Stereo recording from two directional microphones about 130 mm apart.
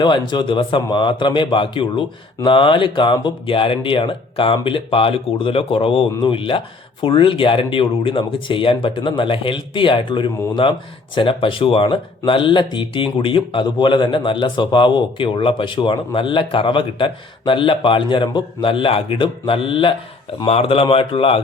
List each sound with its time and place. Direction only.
0.0 s a man's voice: 35° left (ahead or behind)